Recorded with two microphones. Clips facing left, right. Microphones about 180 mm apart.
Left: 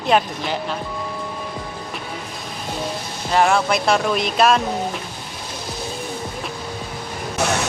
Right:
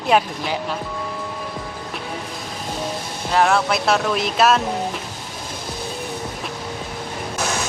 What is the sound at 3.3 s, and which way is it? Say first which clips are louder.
Speech: left 1 dB; centre (ahead or behind).